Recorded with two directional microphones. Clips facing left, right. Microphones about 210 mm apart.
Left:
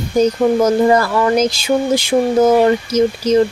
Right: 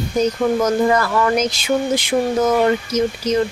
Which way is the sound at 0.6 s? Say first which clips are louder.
Left 4 dB; 30° left (ahead or behind).